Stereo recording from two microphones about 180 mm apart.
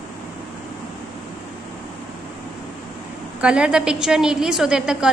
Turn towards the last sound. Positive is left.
turn(degrees=-5)  # may be behind; listen again after turning